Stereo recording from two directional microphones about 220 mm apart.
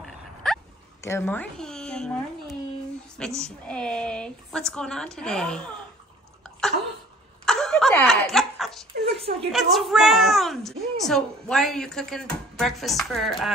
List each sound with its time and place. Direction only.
0.0 s a sound: centre (ahead or behind)
1.0 s a woman's voice: 10° left (ahead or behind)
7.4 s snicker: centre (ahead or behind)
9.1 s a woman's voice: 25° right (ahead or behind)
9.5 s a woman's voice: centre (ahead or behind)